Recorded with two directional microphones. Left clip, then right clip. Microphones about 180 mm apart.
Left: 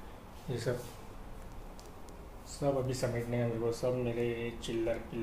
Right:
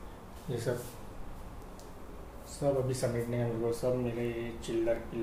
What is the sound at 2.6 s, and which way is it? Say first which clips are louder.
Speech: right 2 dB; 25° left (ahead or behind).